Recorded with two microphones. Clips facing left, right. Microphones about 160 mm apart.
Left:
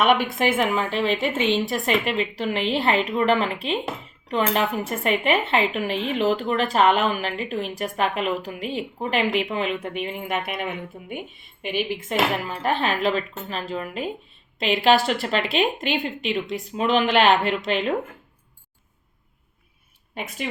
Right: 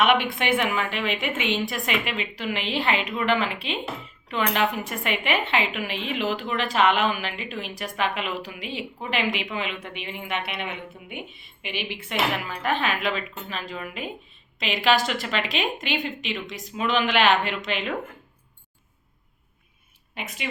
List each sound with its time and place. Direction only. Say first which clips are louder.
0.2 s speech: left 3 dB; 40° left (ahead or behind)
20.1 s speech: left 4 dB; 45° left (ahead or behind)